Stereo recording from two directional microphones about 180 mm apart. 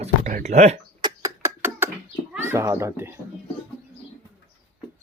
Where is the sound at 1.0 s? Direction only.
15° right (ahead or behind).